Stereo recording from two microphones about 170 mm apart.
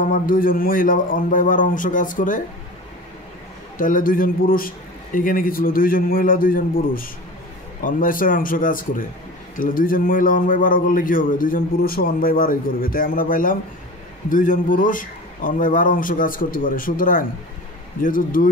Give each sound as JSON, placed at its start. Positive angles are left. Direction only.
{"t": 0.0, "sound": "a man's voice", "side_deg": 55}
{"t": 3.7, "sound": "a man's voice", "side_deg": 50}